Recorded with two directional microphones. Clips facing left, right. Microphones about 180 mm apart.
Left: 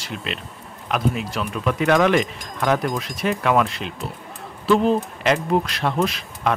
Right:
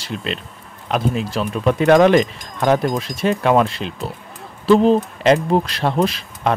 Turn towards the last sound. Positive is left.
turn(degrees=-30)  # may be behind; listen again after turning